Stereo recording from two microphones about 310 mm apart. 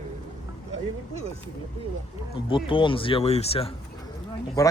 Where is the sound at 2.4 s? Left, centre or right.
Centre.